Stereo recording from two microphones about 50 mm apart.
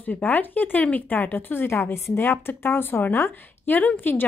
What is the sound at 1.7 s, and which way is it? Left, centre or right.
A woman's voice, left.